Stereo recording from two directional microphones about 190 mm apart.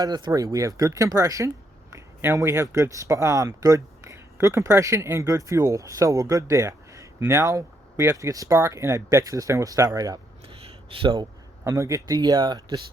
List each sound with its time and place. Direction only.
0.0 s speech: 20° right (ahead or behind)
10.4 s a sound: 30° right (ahead or behind)
11.6 s speech: 15° right (ahead or behind)